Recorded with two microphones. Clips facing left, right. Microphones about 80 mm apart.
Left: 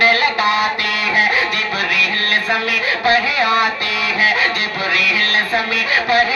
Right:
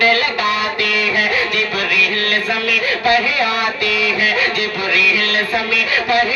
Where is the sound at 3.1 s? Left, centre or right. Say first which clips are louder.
Left 1 dB; left.